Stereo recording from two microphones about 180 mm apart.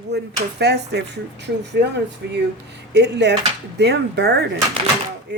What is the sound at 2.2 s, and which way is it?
Speech, 70° right (ahead or behind).